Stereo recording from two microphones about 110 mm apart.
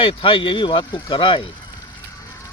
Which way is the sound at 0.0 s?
55° left (ahead or behind).